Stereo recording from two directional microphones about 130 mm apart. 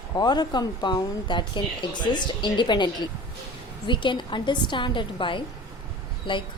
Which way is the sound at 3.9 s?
40° left (ahead or behind).